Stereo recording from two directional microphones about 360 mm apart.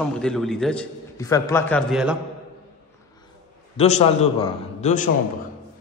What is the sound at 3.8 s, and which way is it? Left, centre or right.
Speech, centre.